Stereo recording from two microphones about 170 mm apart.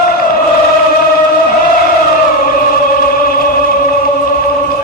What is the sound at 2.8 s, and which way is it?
Music, 60° left (ahead or behind).